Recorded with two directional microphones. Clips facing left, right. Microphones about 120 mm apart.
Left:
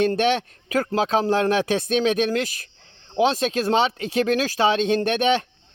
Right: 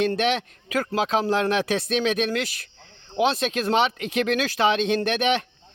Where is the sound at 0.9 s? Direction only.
35° left (ahead or behind).